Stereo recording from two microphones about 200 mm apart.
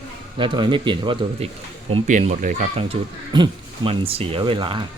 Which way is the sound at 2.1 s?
40° right (ahead or behind).